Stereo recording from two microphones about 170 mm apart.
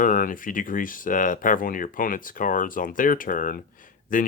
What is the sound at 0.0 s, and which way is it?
Speech, 55° left (ahead or behind).